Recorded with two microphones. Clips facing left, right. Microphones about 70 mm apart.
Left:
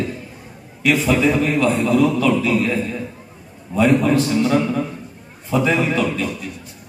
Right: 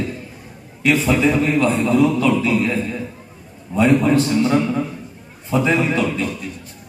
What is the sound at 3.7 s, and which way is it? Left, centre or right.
Speech, centre.